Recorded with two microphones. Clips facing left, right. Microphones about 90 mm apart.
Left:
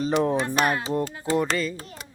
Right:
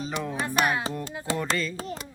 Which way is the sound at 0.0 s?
45° left (ahead or behind).